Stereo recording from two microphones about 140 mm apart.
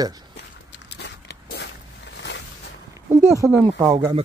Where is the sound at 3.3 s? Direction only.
20° right (ahead or behind).